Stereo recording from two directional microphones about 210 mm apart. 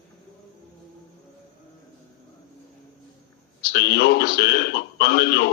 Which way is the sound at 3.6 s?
50° left (ahead or behind).